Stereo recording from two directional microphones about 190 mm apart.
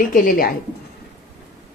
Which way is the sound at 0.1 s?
45° left (ahead or behind).